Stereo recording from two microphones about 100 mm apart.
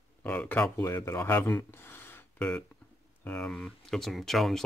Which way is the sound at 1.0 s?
25° left (ahead or behind).